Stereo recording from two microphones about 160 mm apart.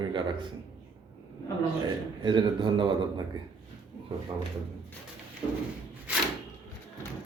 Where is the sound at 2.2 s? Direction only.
30° right (ahead or behind).